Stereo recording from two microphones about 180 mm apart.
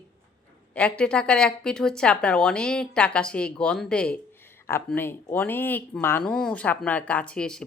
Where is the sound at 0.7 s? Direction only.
10° left (ahead or behind).